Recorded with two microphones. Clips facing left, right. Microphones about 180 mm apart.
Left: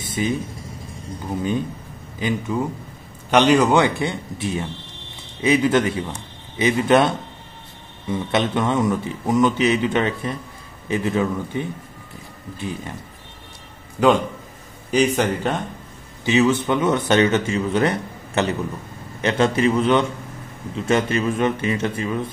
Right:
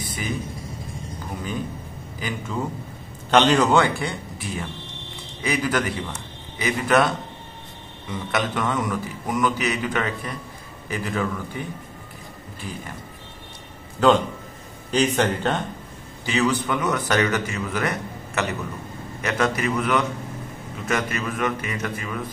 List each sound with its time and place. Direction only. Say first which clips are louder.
0.0 s vehicle: left 7 dB; 25° left (ahead or behind)
2.1 s a man's voice: left 6 dB; 20° left (ahead or behind)
14.0 s speech: left 1 dB; 10° left (ahead or behind)
16.3 s a man's voice: left 5 dB; 20° left (ahead or behind)